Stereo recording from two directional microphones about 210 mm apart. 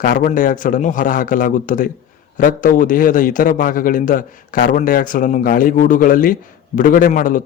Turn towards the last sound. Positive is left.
turn(degrees=40)  # may be behind; listen again after turning